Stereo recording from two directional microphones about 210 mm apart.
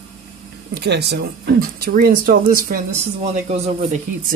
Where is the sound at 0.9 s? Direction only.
50° right (ahead or behind); by 4.0 s 30° right (ahead or behind).